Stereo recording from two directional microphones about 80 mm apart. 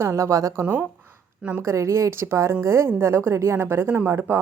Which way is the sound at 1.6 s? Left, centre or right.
Right.